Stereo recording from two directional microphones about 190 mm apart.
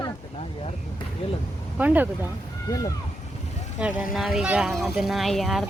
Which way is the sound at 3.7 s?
5° right (ahead or behind).